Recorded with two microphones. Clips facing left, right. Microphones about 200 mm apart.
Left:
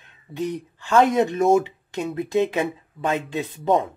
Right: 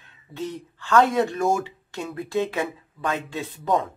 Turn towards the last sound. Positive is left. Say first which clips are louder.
# left 3 dB
turn(degrees=20)  # may be behind; listen again after turning